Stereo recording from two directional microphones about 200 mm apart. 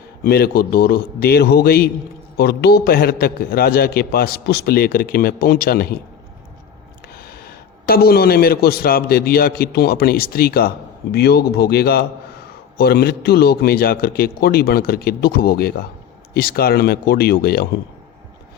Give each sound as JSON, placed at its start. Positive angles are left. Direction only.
{"t": 0.3, "sound": "a man's voice", "side_deg": 50}
{"t": 7.2, "sound": "a man's voice", "side_deg": 50}